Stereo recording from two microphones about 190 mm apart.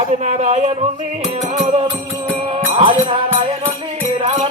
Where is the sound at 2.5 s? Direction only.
30° right (ahead or behind).